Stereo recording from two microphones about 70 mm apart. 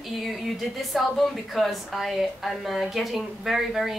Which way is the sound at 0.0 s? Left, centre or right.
Centre.